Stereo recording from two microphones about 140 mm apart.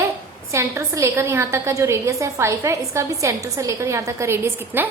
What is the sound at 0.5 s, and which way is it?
A woman's voice, 20° right (ahead or behind).